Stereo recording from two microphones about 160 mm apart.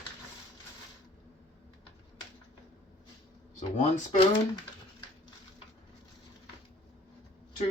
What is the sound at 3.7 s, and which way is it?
Speech, 50° left (ahead or behind).